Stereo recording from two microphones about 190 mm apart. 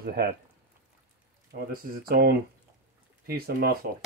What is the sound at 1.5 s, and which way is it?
Speech, 50° right (ahead or behind).